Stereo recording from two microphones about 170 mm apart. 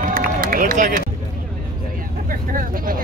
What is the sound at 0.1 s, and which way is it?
Run, 55° right (ahead or behind).